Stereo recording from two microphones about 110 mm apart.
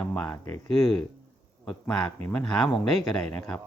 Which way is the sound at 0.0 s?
10° left (ahead or behind).